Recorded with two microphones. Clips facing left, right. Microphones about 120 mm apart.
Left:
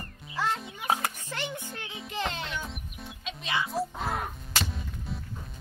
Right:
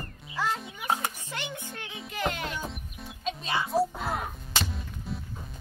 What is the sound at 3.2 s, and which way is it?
Music, 35° right (ahead or behind).